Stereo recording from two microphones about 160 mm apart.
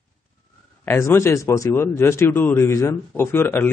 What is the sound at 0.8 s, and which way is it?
Speech, 15° left (ahead or behind).